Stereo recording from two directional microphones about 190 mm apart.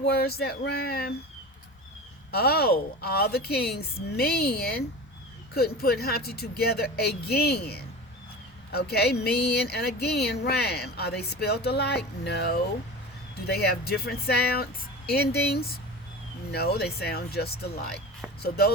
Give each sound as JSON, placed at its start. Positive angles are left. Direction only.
{"t": 0.0, "sound": "speech", "side_deg": 55}
{"t": 2.3, "sound": "speech", "side_deg": 55}